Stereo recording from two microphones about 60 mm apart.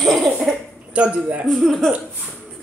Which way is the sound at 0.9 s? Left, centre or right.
Centre.